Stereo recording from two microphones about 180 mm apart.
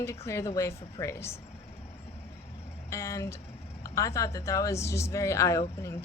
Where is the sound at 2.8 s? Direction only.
15° left (ahead or behind).